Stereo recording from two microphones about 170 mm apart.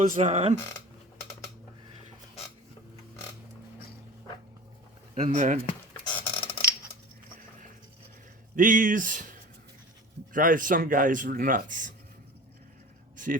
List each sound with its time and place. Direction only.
0.1 s speech: 45° right (ahead or behind)
5.1 s speech: 45° right (ahead or behind)
6.1 s a sound: 30° left (ahead or behind)
8.5 s speech: 50° right (ahead or behind)